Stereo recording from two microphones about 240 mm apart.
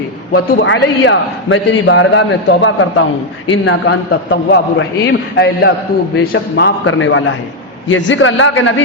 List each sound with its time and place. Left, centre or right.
0.3 s a man's voice: left